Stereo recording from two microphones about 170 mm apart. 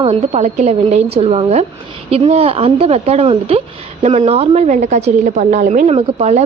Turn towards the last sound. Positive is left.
turn(degrees=-40)  # may be behind; listen again after turning